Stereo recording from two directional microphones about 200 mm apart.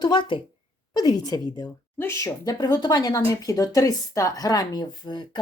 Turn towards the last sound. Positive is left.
turn(degrees=20)  # may be behind; listen again after turning